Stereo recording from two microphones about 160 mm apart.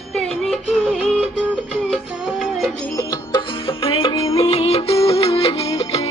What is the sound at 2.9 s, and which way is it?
Music, 25° left (ahead or behind).